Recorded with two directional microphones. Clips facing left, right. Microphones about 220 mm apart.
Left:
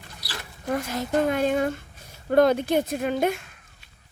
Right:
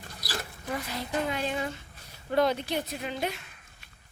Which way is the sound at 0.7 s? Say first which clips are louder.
Left 8 dB; 45° left (ahead or behind).